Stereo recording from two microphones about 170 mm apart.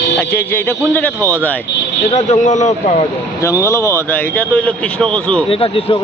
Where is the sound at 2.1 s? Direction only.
45° left (ahead or behind).